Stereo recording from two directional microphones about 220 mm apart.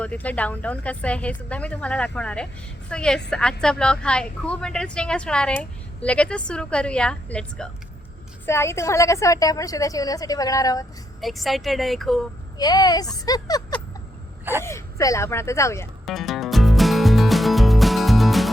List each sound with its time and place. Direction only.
0.0 s a woman's voice: 5° left (ahead or behind)
11.2 s speech: centre (ahead or behind)
12.5 s a woman's voice: 15° left (ahead or behind)
16.0 s music: centre (ahead or behind)